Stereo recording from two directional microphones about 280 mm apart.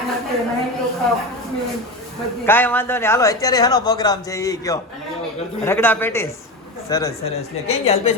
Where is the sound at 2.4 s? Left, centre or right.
Centre.